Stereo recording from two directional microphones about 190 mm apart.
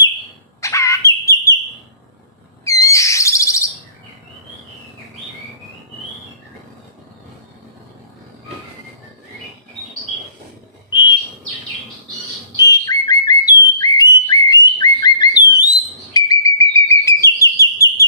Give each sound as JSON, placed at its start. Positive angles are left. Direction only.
{"t": 0.6, "sound": "bird", "side_deg": 15}
{"t": 2.6, "sound": "bird vocalization", "side_deg": 15}
{"t": 10.8, "sound": "bird", "side_deg": 25}
{"t": 12.5, "sound": "whistle", "side_deg": 20}